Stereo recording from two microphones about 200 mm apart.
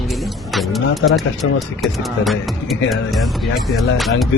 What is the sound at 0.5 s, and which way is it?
Speech, centre (ahead or behind).